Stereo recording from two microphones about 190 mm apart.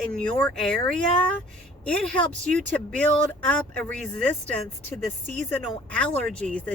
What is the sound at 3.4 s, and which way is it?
Speech, 5° left (ahead or behind).